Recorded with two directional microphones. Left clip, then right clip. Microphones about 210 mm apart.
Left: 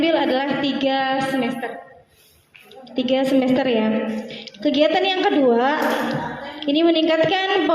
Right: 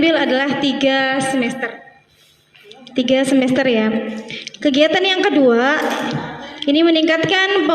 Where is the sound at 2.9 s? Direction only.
55° right (ahead or behind).